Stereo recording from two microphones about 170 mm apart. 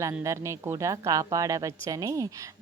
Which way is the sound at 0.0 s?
20° right (ahead or behind).